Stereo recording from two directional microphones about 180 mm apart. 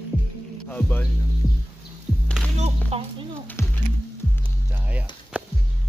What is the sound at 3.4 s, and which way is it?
Music, 15° left (ahead or behind).